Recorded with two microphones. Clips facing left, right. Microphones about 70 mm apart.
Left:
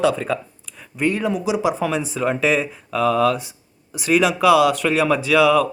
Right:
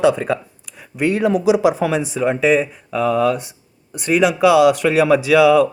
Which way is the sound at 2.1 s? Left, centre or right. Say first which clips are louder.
Right 4 dB; centre.